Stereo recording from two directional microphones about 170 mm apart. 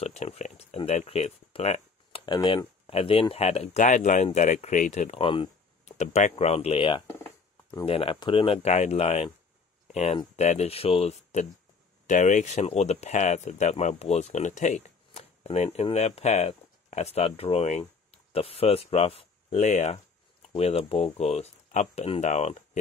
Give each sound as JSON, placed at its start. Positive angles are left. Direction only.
{"t": 0.0, "sound": "speech", "side_deg": 40}
{"t": 5.9, "sound": "speech", "side_deg": 40}